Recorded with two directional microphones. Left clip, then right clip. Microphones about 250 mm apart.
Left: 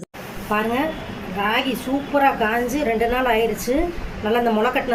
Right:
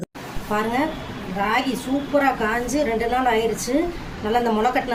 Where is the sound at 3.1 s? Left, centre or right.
Centre.